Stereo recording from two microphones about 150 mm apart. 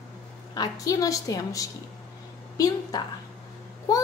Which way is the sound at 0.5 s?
25° left (ahead or behind).